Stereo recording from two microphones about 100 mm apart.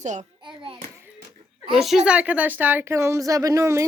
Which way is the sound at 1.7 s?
5° right (ahead or behind).